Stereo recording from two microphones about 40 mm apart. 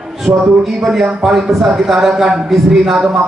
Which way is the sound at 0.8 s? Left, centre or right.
Centre.